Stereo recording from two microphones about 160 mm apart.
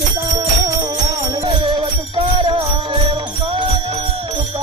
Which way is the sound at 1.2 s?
30° right (ahead or behind).